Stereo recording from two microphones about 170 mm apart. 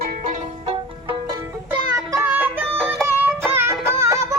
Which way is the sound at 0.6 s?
30° right (ahead or behind).